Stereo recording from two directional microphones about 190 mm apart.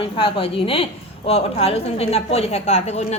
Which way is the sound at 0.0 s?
30° left (ahead or behind).